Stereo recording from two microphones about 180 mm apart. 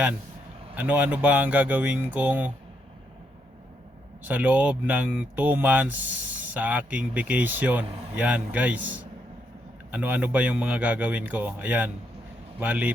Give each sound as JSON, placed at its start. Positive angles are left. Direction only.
{"t": 0.8, "sound": "a man's voice", "side_deg": -10}
{"t": 4.2, "sound": "a man's voice", "side_deg": -10}
{"t": 9.9, "sound": "a man's voice", "side_deg": -10}